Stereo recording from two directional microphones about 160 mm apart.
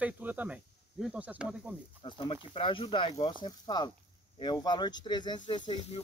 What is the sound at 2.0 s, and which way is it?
Speech, 35° left (ahead or behind).